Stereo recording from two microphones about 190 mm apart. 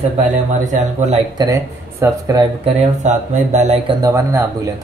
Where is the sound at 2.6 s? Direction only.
40° right (ahead or behind).